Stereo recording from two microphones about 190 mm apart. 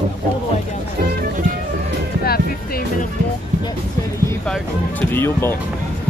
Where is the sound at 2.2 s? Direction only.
55° left (ahead or behind).